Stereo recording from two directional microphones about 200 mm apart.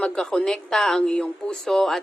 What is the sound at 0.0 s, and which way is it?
A woman's voice, 5° left (ahead or behind).